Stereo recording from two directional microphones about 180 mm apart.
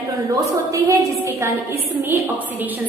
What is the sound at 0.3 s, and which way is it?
A woman's voice, 20° right (ahead or behind).